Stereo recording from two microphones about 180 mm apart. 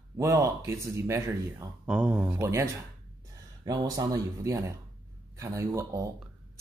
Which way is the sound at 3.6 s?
20° right (ahead or behind).